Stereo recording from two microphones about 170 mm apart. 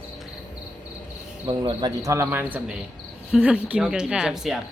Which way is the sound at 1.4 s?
25° right (ahead or behind).